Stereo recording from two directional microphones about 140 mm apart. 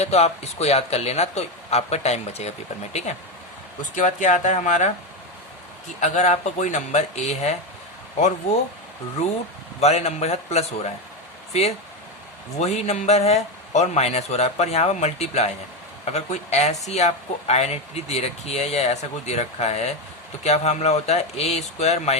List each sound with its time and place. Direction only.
0.0 s speech: 50° left (ahead or behind)
3.9 s speech: 60° left (ahead or behind)
6.0 s speech: 55° left (ahead or behind)
9.8 s speech: 50° left (ahead or behind)